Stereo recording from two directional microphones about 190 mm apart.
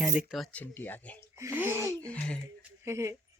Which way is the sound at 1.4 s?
10° right (ahead or behind).